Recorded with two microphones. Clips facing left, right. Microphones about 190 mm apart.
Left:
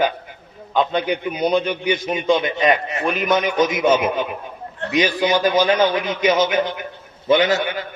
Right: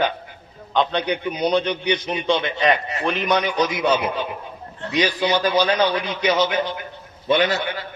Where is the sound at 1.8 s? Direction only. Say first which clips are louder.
Left 1 dB; 45° left (ahead or behind).